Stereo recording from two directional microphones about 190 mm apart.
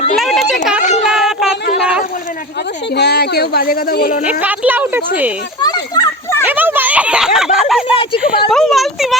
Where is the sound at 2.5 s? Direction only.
60° left (ahead or behind).